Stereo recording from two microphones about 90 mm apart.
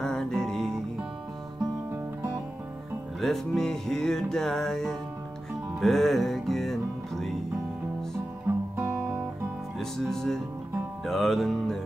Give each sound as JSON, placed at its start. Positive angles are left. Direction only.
{"t": 0.0, "sound": "music", "side_deg": 5}
{"t": 3.2, "sound": "music", "side_deg": 5}
{"t": 8.5, "sound": "music", "side_deg": -20}
{"t": 8.8, "sound": "guitar", "side_deg": -10}
{"t": 9.8, "sound": "music", "side_deg": 5}